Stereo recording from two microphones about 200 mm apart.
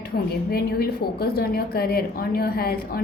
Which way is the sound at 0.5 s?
50° left (ahead or behind).